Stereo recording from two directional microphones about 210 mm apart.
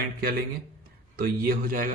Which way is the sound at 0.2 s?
45° right (ahead or behind).